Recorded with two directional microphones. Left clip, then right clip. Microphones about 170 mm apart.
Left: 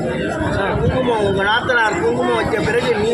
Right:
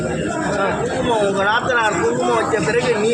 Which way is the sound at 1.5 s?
15° right (ahead or behind).